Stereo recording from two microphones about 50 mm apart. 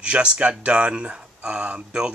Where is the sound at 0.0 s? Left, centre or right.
Right.